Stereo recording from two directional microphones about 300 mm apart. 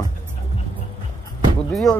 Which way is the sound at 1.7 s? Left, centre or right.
Centre.